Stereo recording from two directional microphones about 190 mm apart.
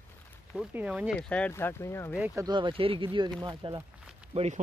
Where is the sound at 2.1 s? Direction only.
10° right (ahead or behind).